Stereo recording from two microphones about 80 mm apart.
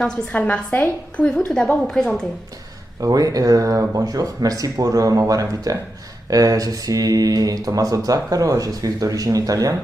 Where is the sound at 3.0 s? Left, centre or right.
Right.